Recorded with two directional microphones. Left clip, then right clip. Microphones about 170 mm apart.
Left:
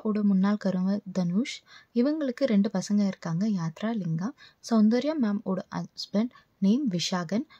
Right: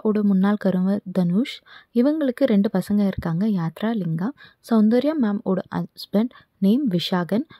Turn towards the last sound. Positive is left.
turn(degrees=-40)  # may be behind; listen again after turning